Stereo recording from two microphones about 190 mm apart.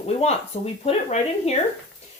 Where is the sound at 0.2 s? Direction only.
35° left (ahead or behind).